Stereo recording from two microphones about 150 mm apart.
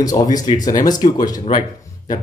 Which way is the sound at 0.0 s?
25° left (ahead or behind).